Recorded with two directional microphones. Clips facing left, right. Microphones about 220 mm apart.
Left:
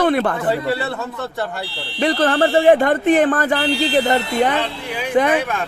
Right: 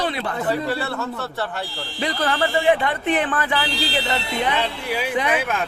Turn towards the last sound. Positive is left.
turn(degrees=50)  # may be behind; listen again after turning